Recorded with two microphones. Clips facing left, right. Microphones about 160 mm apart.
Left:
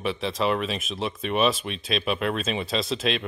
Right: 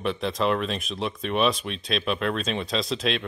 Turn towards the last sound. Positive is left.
turn(degrees=0)  # may be behind; listen again after turning